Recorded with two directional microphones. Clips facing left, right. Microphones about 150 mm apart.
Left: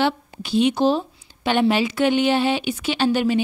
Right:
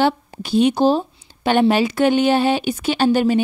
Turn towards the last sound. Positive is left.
turn(degrees=-45)  # may be behind; listen again after turning